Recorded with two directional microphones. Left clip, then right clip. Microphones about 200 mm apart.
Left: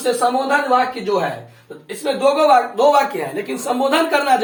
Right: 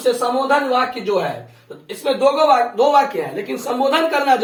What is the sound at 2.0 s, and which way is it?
A man's voice, 20° left (ahead or behind).